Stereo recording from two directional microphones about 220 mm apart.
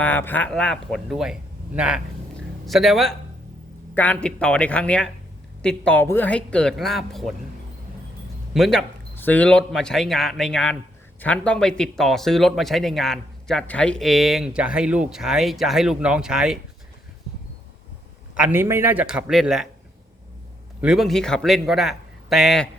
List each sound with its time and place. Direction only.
0.0 s speech: 10° left (ahead or behind)
8.5 s speech: centre (ahead or behind)
18.3 s speech: 10° right (ahead or behind)
20.8 s speech: centre (ahead or behind)